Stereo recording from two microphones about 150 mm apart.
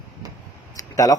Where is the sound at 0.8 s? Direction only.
20° left (ahead or behind).